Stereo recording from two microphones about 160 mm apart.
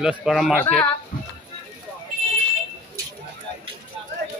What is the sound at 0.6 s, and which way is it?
Speech, 15° left (ahead or behind).